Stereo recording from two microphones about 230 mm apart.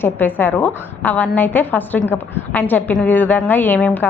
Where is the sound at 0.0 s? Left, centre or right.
Centre.